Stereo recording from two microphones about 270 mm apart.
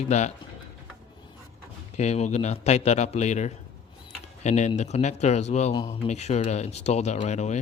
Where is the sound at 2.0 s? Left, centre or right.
Left.